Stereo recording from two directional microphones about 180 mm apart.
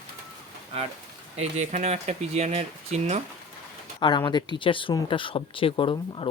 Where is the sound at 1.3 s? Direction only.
40° right (ahead or behind).